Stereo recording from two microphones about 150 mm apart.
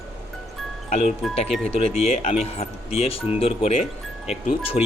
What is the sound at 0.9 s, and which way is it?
Speech, 45° left (ahead or behind).